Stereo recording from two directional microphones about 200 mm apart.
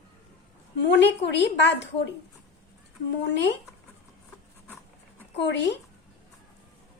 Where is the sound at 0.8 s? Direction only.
60° left (ahead or behind).